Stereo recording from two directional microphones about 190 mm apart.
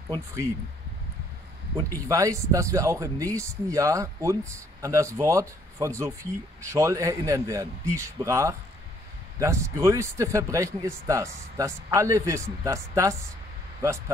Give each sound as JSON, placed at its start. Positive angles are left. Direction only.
{"t": 0.1, "sound": "speech", "side_deg": -15}
{"t": 2.0, "sound": "speech", "side_deg": -15}